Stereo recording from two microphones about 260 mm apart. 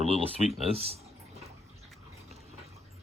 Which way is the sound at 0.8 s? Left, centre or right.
Right.